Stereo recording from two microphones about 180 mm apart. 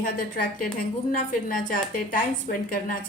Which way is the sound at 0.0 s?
50° left (ahead or behind).